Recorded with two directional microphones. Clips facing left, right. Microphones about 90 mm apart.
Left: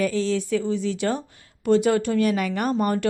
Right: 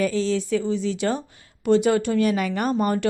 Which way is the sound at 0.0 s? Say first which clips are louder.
Right 1 dB; 30° right (ahead or behind).